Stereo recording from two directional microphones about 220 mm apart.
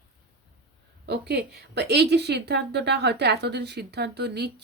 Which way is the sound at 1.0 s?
50° right (ahead or behind).